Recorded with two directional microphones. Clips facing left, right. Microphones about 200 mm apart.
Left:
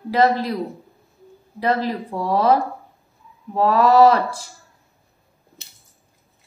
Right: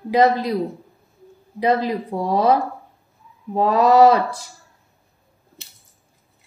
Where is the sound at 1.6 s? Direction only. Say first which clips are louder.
Right 2 dB; 15° right (ahead or behind).